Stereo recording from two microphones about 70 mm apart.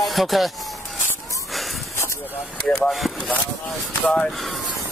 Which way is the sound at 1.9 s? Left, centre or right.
Left.